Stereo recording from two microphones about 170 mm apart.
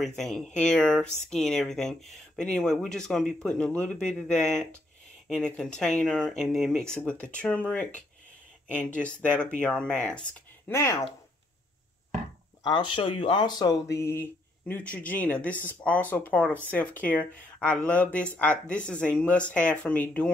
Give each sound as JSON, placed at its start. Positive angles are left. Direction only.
{"t": 0.0, "sound": "speech", "side_deg": 0}
{"t": 10.7, "sound": "speech", "side_deg": 15}
{"t": 12.6, "sound": "speech", "side_deg": 30}